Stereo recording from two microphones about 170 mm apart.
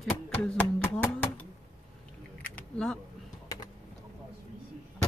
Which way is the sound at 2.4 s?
5° left (ahead or behind).